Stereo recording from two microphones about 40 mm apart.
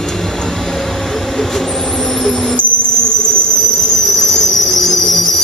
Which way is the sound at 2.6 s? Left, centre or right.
Left.